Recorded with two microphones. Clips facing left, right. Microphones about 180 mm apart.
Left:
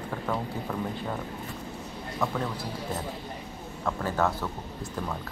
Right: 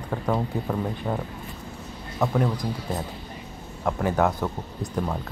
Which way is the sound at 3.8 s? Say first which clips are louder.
Right 5 dB; 15° right (ahead or behind).